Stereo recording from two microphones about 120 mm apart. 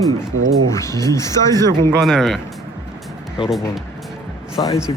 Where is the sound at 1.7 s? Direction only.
35° right (ahead or behind).